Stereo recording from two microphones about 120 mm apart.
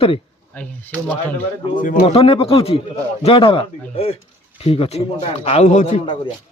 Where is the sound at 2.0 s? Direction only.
55° left (ahead or behind).